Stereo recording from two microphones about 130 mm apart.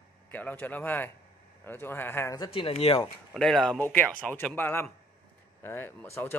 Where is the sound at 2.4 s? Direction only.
40° left (ahead or behind).